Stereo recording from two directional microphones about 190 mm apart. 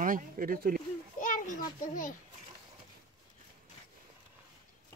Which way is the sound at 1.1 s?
45° left (ahead or behind).